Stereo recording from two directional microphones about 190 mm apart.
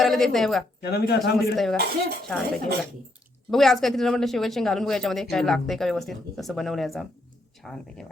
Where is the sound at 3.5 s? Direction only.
Centre (ahead or behind).